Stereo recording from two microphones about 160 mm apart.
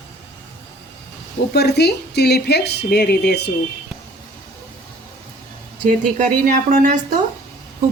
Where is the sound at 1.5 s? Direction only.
90° left.